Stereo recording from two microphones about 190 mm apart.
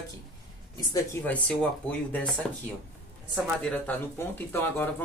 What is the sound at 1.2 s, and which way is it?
Speech, 5° left (ahead or behind).